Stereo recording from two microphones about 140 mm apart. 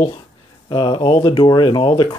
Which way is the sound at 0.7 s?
35° left (ahead or behind).